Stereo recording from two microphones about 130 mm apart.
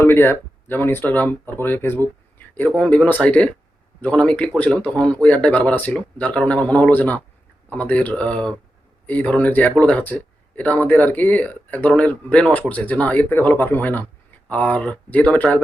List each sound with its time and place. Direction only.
0.0 s speech: 15° left (ahead or behind)